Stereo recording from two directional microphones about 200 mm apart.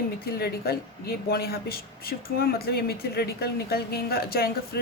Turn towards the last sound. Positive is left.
turn(degrees=50)  # may be behind; listen again after turning